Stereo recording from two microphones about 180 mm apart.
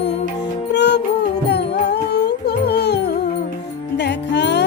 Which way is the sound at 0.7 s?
70° left (ahead or behind).